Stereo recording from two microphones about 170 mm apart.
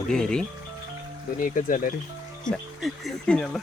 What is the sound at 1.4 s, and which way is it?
Speech, 50° left (ahead or behind).